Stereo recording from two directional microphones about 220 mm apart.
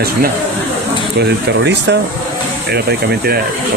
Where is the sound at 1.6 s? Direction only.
50° right (ahead or behind).